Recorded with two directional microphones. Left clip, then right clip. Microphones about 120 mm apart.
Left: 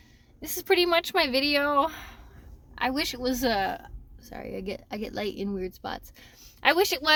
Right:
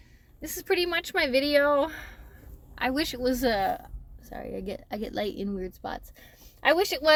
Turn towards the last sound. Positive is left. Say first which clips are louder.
# even
turn(degrees=25)  # may be behind; listen again after turning